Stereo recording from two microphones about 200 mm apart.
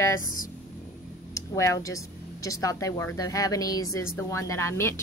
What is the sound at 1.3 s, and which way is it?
Speech, 15° left (ahead or behind).